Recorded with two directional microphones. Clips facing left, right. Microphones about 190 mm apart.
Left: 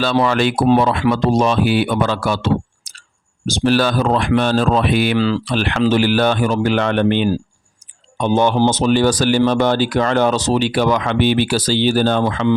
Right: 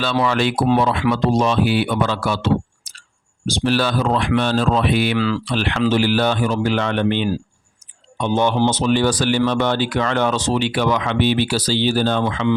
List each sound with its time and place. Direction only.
0.0 s speech: 40° left (ahead or behind)
5.1 s speech: 30° left (ahead or behind)
5.5 s speech: 45° left (ahead or behind)